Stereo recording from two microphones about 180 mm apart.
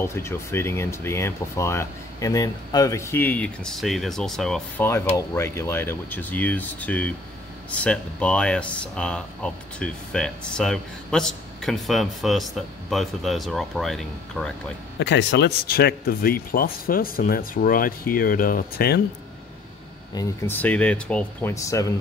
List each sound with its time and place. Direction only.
0.0 s speech: 15° left (ahead or behind)
4.8 s speech: 15° left (ahead or behind)
15.0 s speech: 75° left (ahead or behind); by 18.9 s 55° left (ahead or behind)
20.2 s speech: 10° left (ahead or behind)